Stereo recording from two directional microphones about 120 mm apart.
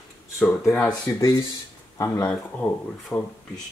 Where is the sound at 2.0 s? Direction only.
25° left (ahead or behind).